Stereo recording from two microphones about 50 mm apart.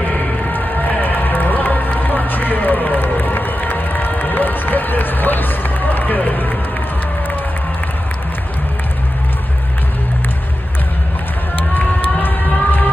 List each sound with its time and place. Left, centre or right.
0.5 s music: left
11.7 s run: left